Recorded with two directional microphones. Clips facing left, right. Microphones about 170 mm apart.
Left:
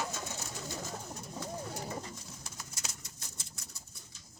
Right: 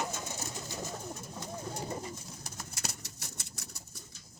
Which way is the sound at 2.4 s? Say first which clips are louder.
Right 6 dB; 65° right (ahead or behind).